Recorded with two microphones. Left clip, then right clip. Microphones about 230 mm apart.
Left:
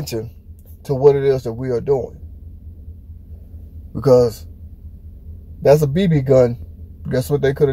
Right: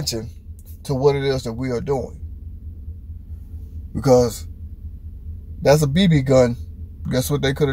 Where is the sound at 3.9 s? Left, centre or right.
Centre.